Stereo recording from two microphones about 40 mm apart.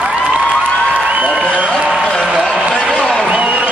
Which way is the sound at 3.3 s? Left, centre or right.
Right.